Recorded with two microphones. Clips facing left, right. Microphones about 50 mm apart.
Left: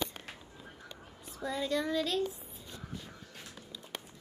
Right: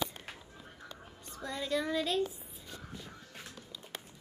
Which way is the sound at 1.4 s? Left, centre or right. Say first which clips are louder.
Left 1 dB; centre.